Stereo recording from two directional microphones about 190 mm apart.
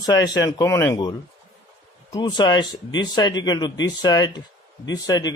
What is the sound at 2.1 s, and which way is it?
A man's voice, 20° left (ahead or behind).